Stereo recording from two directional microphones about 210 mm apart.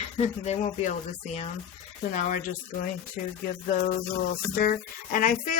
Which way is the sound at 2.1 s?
40° left (ahead or behind).